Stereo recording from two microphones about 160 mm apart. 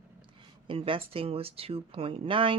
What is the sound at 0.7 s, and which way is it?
Speech, 35° right (ahead or behind).